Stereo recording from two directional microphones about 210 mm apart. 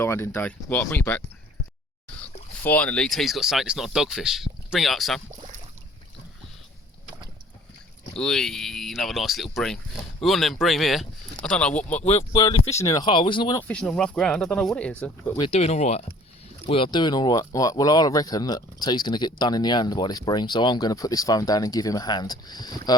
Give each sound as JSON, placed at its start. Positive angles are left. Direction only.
{"t": 0.0, "sound": "speech", "side_deg": 10}
{"t": 2.6, "sound": "speech", "side_deg": 5}
{"t": 8.1, "sound": "speech", "side_deg": 0}
{"t": 12.0, "sound": "speech", "side_deg": 25}
{"t": 12.7, "sound": "speech", "side_deg": 15}
{"t": 13.6, "sound": "speech", "side_deg": 5}
{"t": 15.4, "sound": "speech", "side_deg": 30}